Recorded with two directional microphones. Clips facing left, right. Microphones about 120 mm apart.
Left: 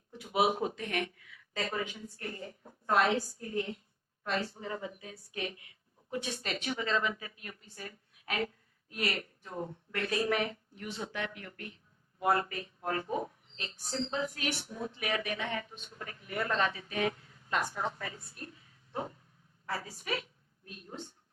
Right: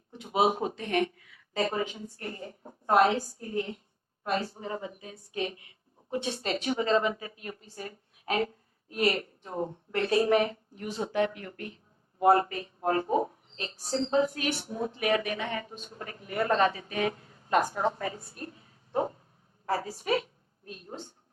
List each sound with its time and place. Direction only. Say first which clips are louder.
0.1 s a woman's voice: right 3 dB; 25° right (ahead or behind)